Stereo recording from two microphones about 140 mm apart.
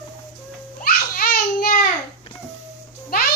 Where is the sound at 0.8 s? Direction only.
90° left.